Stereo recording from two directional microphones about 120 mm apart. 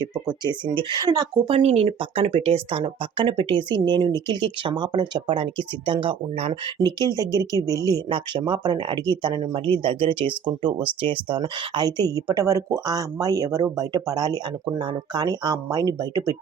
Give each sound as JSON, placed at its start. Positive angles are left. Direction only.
{"t": 0.3, "sound": "speech", "side_deg": -40}
{"t": 1.5, "sound": "speech", "side_deg": -60}
{"t": 6.7, "sound": "speech", "side_deg": -35}